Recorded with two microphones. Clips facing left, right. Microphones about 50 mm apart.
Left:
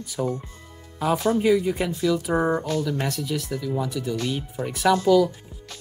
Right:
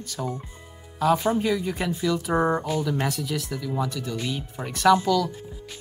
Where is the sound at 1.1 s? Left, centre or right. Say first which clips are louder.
Left 2 dB; centre.